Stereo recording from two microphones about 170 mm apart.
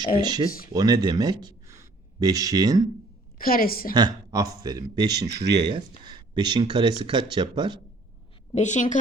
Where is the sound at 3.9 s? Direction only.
25° right (ahead or behind).